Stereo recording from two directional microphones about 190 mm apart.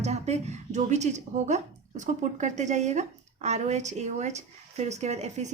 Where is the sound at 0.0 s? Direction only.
35° right (ahead or behind).